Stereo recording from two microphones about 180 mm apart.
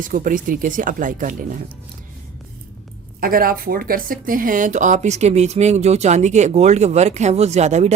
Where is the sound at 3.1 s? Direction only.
55° right (ahead or behind).